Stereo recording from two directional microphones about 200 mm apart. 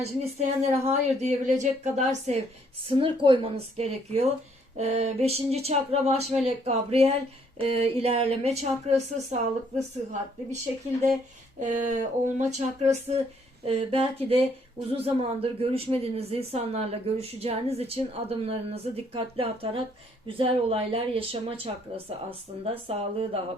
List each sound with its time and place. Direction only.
0.0 s a man's voice: 30° right (ahead or behind)
11.6 s a man's voice: 40° right (ahead or behind)